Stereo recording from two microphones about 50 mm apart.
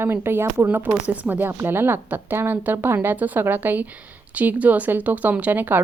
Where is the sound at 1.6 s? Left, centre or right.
Right.